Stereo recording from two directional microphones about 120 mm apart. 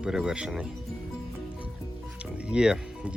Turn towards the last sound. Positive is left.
turn(degrees=-5)  # may be behind; listen again after turning